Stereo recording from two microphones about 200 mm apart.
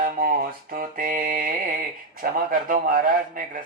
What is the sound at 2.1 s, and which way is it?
Speech, 45° right (ahead or behind).